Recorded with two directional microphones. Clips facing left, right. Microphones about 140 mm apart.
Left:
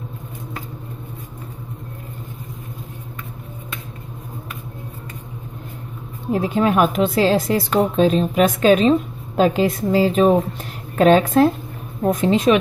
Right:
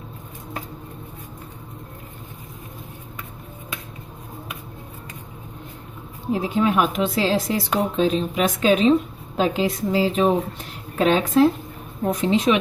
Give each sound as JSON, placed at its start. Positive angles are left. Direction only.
{"t": 6.3, "sound": "a woman's voice", "side_deg": 50}